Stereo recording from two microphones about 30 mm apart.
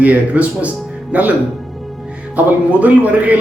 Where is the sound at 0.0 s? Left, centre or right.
Right.